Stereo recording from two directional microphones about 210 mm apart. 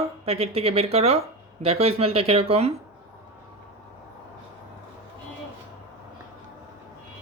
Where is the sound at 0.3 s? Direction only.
30° right (ahead or behind).